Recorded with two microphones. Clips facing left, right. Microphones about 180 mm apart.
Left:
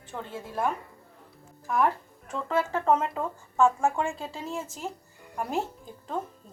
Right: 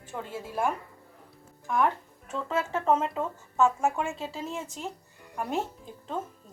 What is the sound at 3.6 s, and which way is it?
Speech, 20° right (ahead or behind).